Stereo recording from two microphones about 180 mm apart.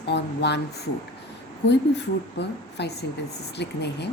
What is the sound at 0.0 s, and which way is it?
Speech, 70° left (ahead or behind).